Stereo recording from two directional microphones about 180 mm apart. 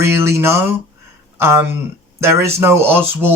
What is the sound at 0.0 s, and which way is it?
Speech, 15° right (ahead or behind).